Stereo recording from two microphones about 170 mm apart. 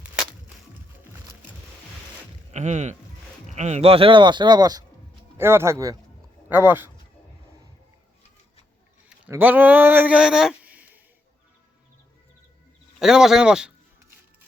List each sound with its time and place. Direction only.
2.5 s speech: 45° right (ahead or behind); by 6.9 s 10° right (ahead or behind)
9.3 s speech: 10° right (ahead or behind)
13.0 s a sound: centre (ahead or behind)